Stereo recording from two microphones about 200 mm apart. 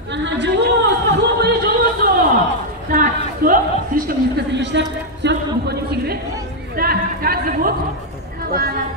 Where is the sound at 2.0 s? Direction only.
45° right (ahead or behind).